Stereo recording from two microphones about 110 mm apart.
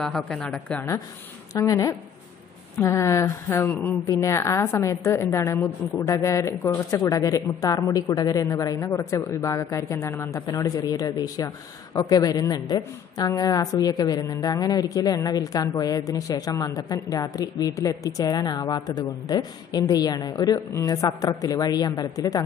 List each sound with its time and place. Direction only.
0.0 s a woman's voice: 5° left (ahead or behind)
1.5 s a man's voice: 30° left (ahead or behind)